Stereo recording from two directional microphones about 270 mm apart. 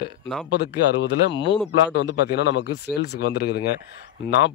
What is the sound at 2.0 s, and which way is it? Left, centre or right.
Speech, left.